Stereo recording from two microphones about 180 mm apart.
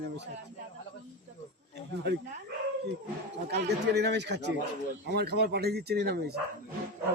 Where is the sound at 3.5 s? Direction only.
65° right (ahead or behind).